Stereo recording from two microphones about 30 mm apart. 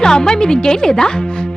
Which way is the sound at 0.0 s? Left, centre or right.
Left.